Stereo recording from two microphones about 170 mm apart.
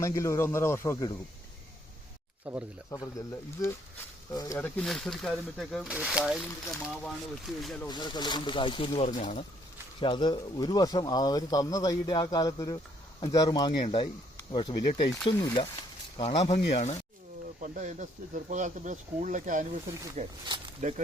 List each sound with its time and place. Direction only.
0.0 s speech: 15° left (ahead or behind)
2.5 s speech: 5° right (ahead or behind)
2.9 s speech: 20° left (ahead or behind)
4.5 s speech: 5° left (ahead or behind)
7.9 s speech: 25° left (ahead or behind)
10.0 s speech: 25° left (ahead or behind)
14.5 s speech: 35° left (ahead or behind)
15.2 s speech: 25° left (ahead or behind)
17.6 s speech: 45° right (ahead or behind)